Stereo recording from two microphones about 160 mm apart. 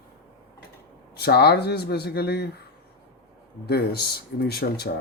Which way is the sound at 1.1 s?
90° left.